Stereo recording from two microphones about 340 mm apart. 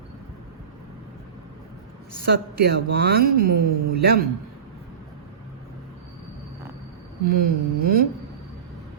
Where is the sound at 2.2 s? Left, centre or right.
Right.